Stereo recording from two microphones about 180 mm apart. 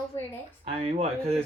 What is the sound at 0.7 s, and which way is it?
Speech, 35° right (ahead or behind).